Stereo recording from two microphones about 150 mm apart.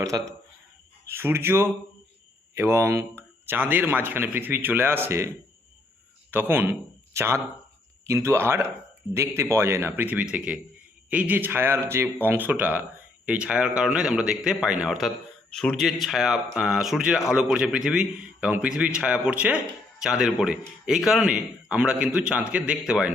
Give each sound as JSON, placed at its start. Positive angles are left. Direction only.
{"t": 1.1, "sound": "a man's voice", "side_deg": -15}
{"t": 6.3, "sound": "a man's voice", "side_deg": -10}